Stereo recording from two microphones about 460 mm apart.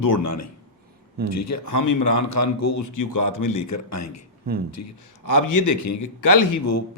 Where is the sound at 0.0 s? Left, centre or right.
Left.